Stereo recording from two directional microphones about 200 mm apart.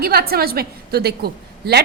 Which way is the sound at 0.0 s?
50° right (ahead or behind).